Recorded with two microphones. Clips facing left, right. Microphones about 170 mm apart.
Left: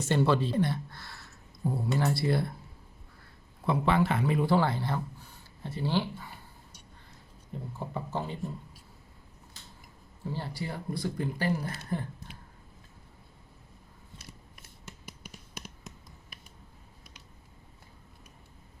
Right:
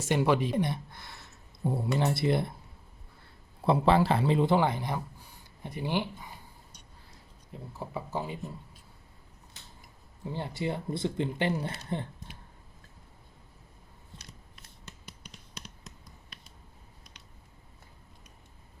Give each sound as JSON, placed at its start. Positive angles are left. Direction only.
{"t": 0.0, "sound": "speech", "side_deg": -10}
{"t": 3.6, "sound": "speech", "side_deg": -30}
{"t": 7.8, "sound": "speech", "side_deg": -10}
{"t": 10.2, "sound": "speech", "side_deg": -20}